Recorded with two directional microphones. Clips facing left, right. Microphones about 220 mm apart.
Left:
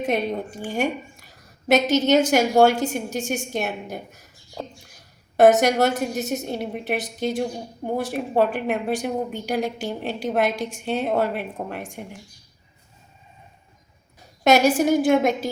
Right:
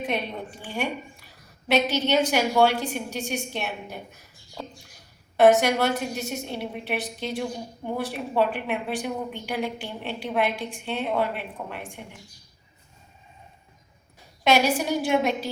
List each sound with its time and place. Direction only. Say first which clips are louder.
0.0 s a woman's voice: left 6 dB; 45° left (ahead or behind)
5.4 s a woman's voice: left 3 dB; 45° left (ahead or behind)
14.4 s a woman's voice: left 5 dB; 45° left (ahead or behind)